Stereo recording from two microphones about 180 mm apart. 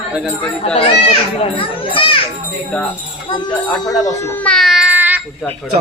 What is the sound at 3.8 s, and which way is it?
Speech, 20° left (ahead or behind).